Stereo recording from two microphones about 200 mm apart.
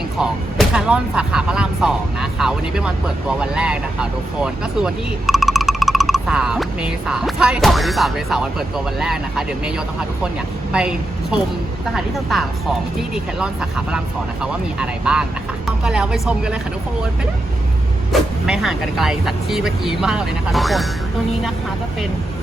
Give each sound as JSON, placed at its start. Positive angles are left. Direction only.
{"t": 0.2, "sound": "a woman's voice", "side_deg": -5}
{"t": 18.1, "sound": "speech", "side_deg": 0}